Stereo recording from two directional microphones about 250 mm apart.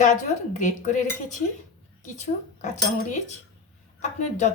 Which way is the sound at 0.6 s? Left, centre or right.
Left.